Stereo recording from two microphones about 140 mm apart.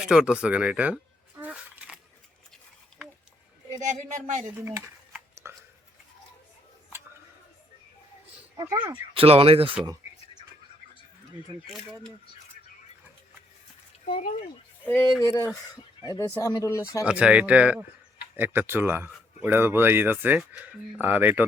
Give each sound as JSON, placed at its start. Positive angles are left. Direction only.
{"t": 0.0, "sound": "speech", "side_deg": -5}
{"t": 1.4, "sound": "a sound", "side_deg": -10}
{"t": 3.8, "sound": "speech", "side_deg": -60}
{"t": 4.6, "sound": "a sound", "side_deg": -20}
{"t": 8.5, "sound": "speech", "side_deg": -20}
{"t": 8.8, "sound": "speech", "side_deg": -40}
{"t": 11.5, "sound": "speech", "side_deg": -35}
{"t": 14.8, "sound": "speech", "side_deg": 15}
{"t": 17.1, "sound": "speech", "side_deg": -10}